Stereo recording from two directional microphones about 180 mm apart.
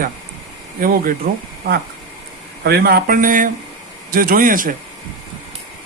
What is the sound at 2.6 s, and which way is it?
Speech, 60° right (ahead or behind).